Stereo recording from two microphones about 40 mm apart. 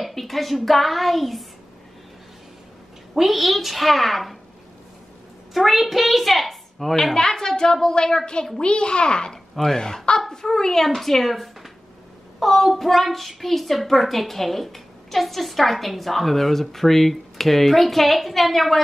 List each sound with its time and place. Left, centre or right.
0.0 s a sound: centre
0.7 s a woman's voice: centre
3.2 s a woman's voice: centre
5.5 s a child's voice: centre
7.2 s a child's voice: centre